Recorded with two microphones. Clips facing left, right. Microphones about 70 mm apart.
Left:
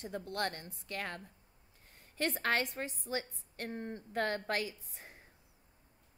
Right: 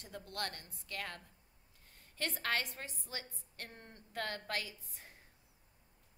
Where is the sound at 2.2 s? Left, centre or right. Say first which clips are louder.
Left 5 dB; left.